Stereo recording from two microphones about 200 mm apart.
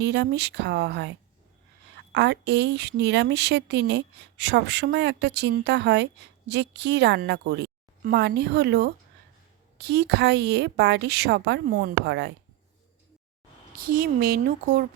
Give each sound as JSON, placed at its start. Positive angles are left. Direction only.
{"t": 0.0, "sound": "speech", "side_deg": -55}
{"t": 2.1, "sound": "speech", "side_deg": -60}
{"t": 13.7, "sound": "speech", "side_deg": -45}